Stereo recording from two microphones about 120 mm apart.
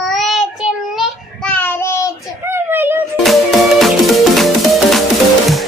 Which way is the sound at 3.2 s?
Centre (ahead or behind).